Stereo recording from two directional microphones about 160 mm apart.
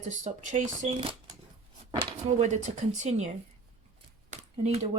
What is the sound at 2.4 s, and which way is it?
Speech, 45° right (ahead or behind).